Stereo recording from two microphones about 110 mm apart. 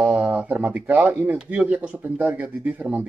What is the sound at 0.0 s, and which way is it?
Speech, 10° right (ahead or behind).